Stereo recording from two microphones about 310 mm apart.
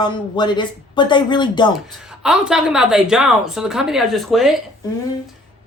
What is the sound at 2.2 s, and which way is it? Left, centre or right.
Speech, centre.